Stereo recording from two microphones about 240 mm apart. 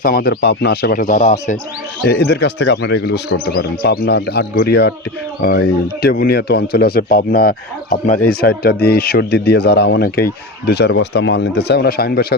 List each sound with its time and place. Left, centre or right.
0.0 s a man's voice: left
2.0 s a man's voice: left